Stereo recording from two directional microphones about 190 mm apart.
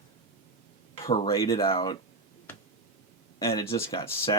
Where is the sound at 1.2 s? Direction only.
15° left (ahead or behind).